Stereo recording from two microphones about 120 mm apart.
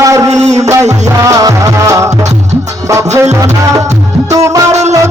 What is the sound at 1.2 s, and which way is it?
Speech, 30° right (ahead or behind).